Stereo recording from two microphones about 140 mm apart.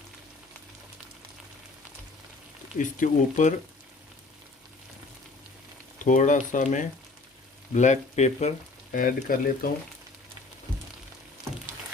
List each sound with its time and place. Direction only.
2.7 s speech: 65° left (ahead or behind)
6.0 s speech: 65° left (ahead or behind)
8.9 s speech: 80° left